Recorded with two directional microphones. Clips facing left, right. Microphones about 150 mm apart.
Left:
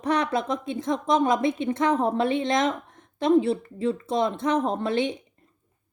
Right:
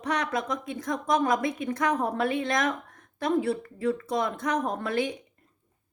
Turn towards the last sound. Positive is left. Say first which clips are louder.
# left 3 dB
turn(degrees=25)  # may be behind; listen again after turning